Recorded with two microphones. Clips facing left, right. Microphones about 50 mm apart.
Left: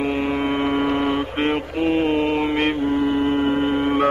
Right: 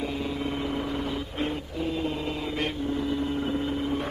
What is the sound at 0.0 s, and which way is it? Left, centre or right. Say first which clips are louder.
Mantra: left 9 dB; left.